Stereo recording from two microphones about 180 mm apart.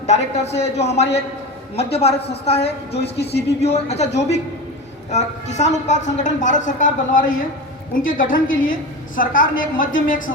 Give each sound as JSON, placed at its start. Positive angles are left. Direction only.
{"t": 0.0, "sound": "a woman's voice", "side_deg": 40}